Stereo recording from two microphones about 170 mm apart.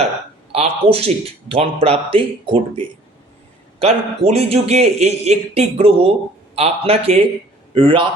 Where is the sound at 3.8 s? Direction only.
35° right (ahead or behind).